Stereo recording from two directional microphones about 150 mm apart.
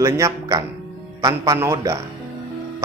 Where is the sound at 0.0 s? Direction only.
20° right (ahead or behind).